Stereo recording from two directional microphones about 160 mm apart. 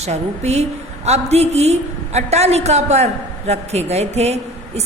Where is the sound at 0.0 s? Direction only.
45° right (ahead or behind).